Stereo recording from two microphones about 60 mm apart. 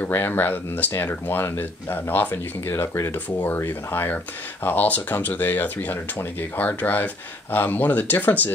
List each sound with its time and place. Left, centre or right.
0.0 s speech: left